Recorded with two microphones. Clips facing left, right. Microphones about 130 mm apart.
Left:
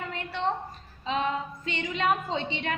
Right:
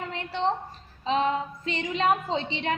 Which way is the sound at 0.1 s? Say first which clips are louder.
Right 3 dB; 25° right (ahead or behind).